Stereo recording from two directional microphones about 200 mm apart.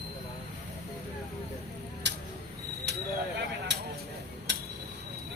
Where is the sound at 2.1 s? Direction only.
60° right (ahead or behind).